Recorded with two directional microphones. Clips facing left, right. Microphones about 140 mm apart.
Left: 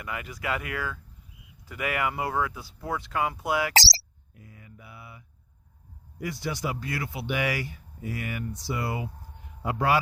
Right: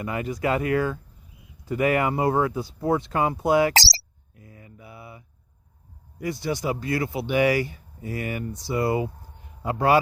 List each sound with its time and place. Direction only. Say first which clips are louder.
0.0 s speech: right 8 dB; 35° right (ahead or behind)
4.5 s mantra: right 5 dB; 35° right (ahead or behind)
6.2 s speech: right 5 dB; 25° right (ahead or behind)